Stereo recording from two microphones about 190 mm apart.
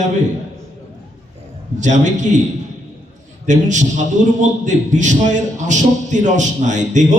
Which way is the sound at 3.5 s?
40° right (ahead or behind).